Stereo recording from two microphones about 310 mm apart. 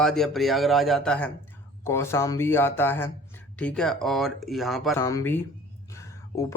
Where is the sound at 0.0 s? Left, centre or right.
Centre.